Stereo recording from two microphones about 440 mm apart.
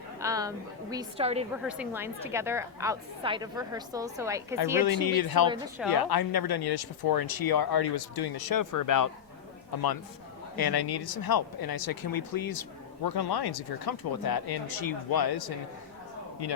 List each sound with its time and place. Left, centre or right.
0.2 s a woman's voice: centre
1.6 s a woman's voice: centre
4.8 s speech: left
5.5 s a woman's voice: centre
5.9 s speech: left
10.5 s speech: left